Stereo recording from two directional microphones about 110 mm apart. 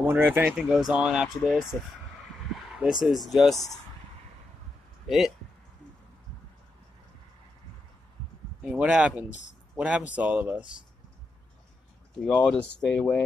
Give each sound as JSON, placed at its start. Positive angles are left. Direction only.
{"t": 0.0, "sound": "speech", "side_deg": -15}
{"t": 0.6, "sound": "speech", "side_deg": -5}
{"t": 5.0, "sound": "speech", "side_deg": 0}
{"t": 8.6, "sound": "speech", "side_deg": -10}
{"t": 12.8, "sound": "speech", "side_deg": 10}